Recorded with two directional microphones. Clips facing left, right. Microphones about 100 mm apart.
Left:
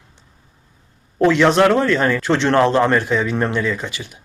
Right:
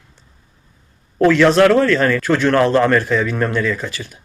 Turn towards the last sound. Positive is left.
turn(degrees=15)  # may be behind; listen again after turning